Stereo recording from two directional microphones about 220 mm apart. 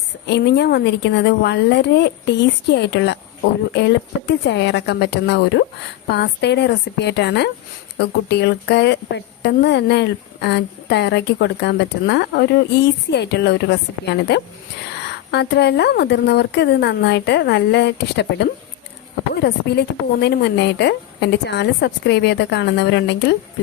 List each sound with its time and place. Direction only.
0.3 s speech: 50° left (ahead or behind)